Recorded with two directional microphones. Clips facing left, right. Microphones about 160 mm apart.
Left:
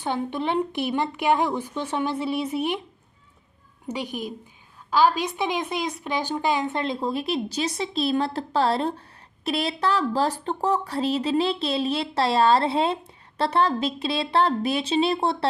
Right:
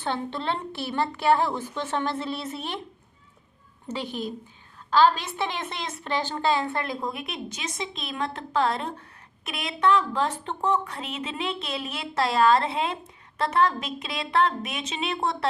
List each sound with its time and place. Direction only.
0.0 s a woman's voice: 15° left (ahead or behind)
3.8 s a woman's voice: 10° left (ahead or behind); by 15.4 s 30° left (ahead or behind)